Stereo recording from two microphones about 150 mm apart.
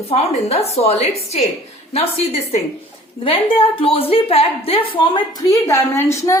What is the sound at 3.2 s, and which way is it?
A woman's voice, 35° left (ahead or behind).